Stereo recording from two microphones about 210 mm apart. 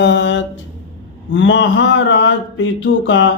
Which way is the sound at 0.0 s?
60° left (ahead or behind).